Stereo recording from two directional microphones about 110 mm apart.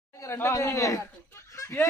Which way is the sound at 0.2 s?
25° left (ahead or behind).